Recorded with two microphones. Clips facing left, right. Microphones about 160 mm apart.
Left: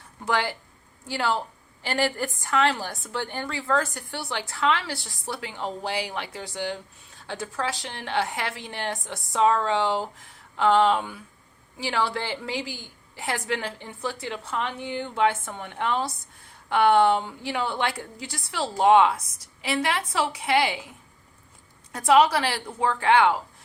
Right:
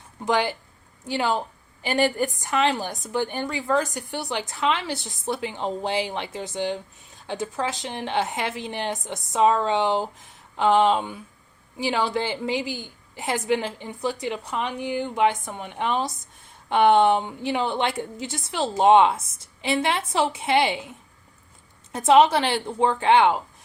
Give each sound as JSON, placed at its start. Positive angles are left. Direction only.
{"t": 0.3, "sound": "a woman's voice", "side_deg": -20}
{"t": 21.9, "sound": "a woman's voice", "side_deg": -25}